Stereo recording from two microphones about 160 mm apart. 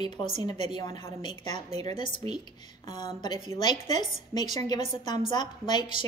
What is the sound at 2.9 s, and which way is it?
Speech, 25° left (ahead or behind).